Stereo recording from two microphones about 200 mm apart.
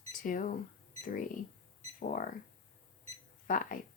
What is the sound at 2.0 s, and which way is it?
Speech, 40° left (ahead or behind).